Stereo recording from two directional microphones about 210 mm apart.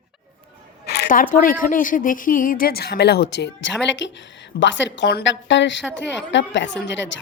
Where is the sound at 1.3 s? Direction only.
40° left (ahead or behind).